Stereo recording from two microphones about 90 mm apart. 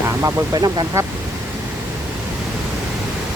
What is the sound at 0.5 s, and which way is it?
Speech, 40° right (ahead or behind).